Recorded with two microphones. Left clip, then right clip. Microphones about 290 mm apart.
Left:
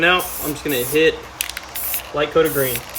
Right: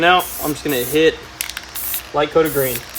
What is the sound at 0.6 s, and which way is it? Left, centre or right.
Speech, centre.